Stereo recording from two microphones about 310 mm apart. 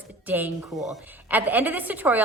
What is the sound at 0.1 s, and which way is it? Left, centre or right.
A woman's voice, centre.